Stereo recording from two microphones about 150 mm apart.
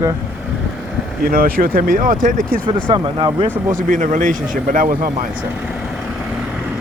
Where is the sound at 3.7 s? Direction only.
60° right (ahead or behind).